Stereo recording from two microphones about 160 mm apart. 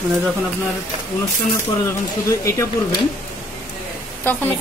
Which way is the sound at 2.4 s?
20° left (ahead or behind).